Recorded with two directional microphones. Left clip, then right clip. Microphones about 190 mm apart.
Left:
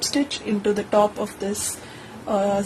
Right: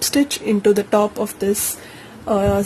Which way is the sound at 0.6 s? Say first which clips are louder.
Right 3 dB; 65° right (ahead or behind).